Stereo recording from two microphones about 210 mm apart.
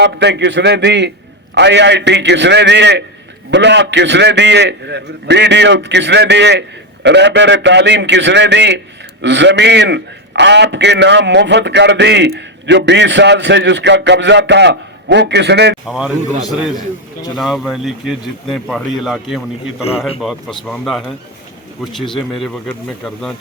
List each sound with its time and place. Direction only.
0.0 s a man's voice: 55° right (ahead or behind)
15.9 s speech: 5° right (ahead or behind)
22.4 s speech: 5° left (ahead or behind)